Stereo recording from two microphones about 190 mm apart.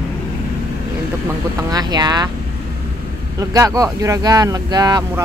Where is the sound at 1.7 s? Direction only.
20° right (ahead or behind).